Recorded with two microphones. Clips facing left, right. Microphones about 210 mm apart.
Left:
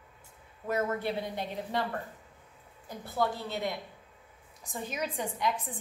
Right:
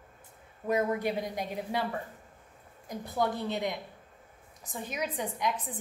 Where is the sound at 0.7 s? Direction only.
15° right (ahead or behind).